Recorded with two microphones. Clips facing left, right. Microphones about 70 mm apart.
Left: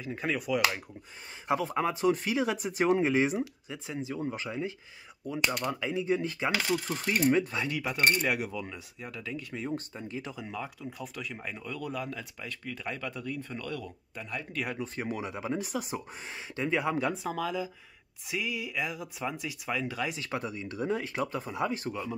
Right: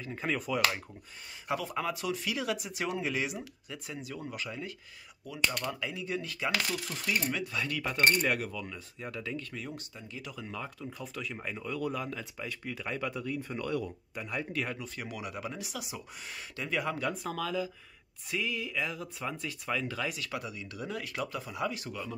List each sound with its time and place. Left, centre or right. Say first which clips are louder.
0.0 s speech: left 2 dB; centre
1.5 s speech: left 4 dB; left
7.9 s speech: even; centre
9.0 s speech: right 1 dB; centre
9.4 s speech: left 6 dB; left
9.8 s speech: left 6 dB; left
10.3 s speech: left 2 dB; centre
13.5 s speech: right 4 dB; centre
14.3 s speech: right 1 dB; centre
14.8 s speech: left 6 dB; left
15.6 s speech: left 7 dB; left
16.3 s speech: left 6 dB; left; by 20.1 s centre
20.1 s speech: left 3 dB; left